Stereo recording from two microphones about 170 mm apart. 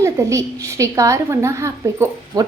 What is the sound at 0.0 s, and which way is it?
A woman's voice, 15° right (ahead or behind).